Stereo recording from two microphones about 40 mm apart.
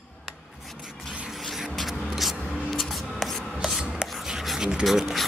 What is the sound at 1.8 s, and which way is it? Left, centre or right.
Writing, centre.